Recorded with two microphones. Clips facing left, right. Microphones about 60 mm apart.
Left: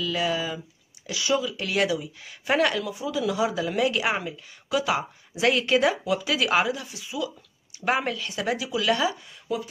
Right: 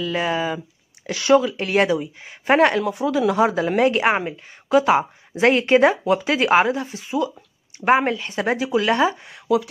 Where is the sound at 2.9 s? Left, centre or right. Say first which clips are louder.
Right 7 dB; right.